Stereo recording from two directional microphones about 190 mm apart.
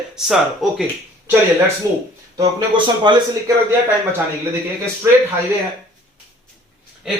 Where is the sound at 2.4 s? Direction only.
25° right (ahead or behind).